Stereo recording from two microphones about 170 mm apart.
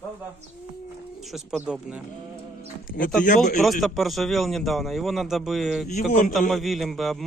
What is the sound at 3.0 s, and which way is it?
Speech, 60° left (ahead or behind).